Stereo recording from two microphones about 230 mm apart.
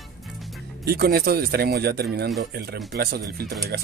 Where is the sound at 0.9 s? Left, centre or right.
Right.